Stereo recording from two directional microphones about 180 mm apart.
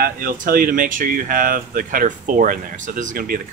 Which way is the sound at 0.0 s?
55° right (ahead or behind).